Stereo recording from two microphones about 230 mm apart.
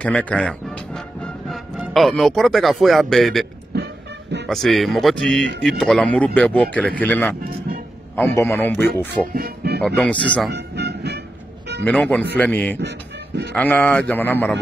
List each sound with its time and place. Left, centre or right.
0.0 s speech: centre
3.7 s music: right
4.5 s speech: centre
9.3 s speech: right
9.8 s speech: centre
10.5 s music: right
11.8 s speech: centre
12.8 s a sound: right
13.6 s speech: centre